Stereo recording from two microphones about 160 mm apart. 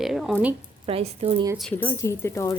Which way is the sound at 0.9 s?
35° right (ahead or behind).